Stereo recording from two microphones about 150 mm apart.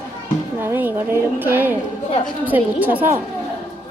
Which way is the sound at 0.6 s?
15° right (ahead or behind).